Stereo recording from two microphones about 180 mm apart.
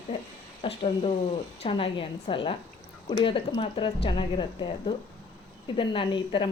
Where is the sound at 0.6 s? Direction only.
30° left (ahead or behind).